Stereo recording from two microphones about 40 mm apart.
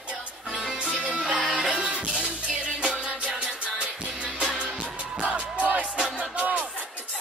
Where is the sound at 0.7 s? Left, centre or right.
Right.